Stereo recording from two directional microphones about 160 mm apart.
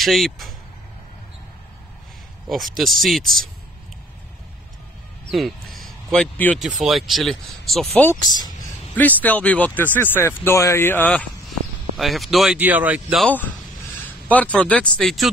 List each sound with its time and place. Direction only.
0.0 s speech: centre (ahead or behind)
2.4 s speech: centre (ahead or behind)
5.3 s speech: centre (ahead or behind)
8.4 s a sound: 25° left (ahead or behind)
8.9 s speech: 10° left (ahead or behind)
12.5 s speech: 10° right (ahead or behind)
13.2 s speech: 10° left (ahead or behind)